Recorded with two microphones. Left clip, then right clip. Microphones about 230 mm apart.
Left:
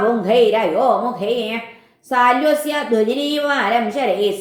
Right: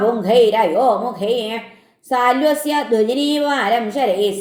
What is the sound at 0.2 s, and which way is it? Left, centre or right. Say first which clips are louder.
A woman's voice: right 3 dB; right.